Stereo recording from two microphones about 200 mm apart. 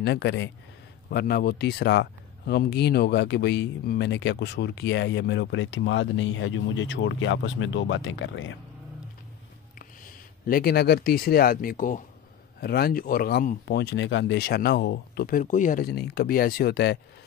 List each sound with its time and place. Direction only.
0.0 s speech: 60° left (ahead or behind)
1.1 s speech: 50° left (ahead or behind); by 8.5 s 70° left (ahead or behind)
9.8 s speech: 45° left (ahead or behind)